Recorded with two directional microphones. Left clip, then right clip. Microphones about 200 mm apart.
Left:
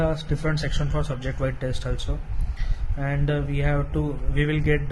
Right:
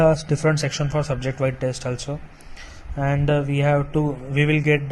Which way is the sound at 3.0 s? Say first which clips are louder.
Right 6 dB; 20° right (ahead or behind).